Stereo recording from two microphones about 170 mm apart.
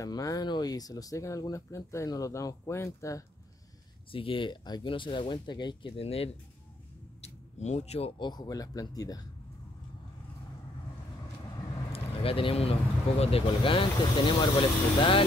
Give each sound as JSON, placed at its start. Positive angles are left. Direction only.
{"t": 0.0, "sound": "speech", "side_deg": 20}
{"t": 4.1, "sound": "speech", "side_deg": 30}
{"t": 7.2, "sound": "a sound", "side_deg": 40}
{"t": 8.2, "sound": "speech", "side_deg": 25}
{"t": 11.9, "sound": "a sound", "side_deg": 35}
{"t": 13.2, "sound": "speech", "side_deg": 35}